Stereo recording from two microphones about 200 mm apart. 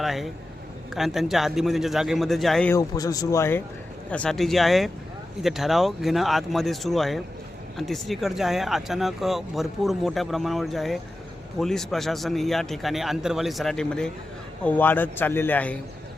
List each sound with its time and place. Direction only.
0.0 s speech: centre (ahead or behind)
2.7 s speech: 15° left (ahead or behind)